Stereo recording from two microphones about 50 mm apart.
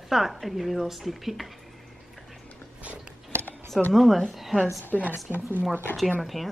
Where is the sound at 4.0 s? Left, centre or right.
Centre.